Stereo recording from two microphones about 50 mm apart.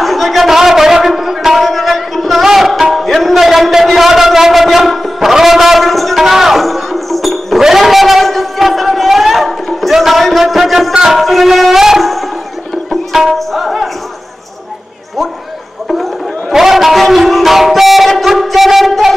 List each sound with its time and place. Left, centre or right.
0.0 s music: centre
5.3 s a sound: centre
11.1 s shofar: centre
12.0 s a sound: centre
12.9 s music: centre
15.9 s music: centre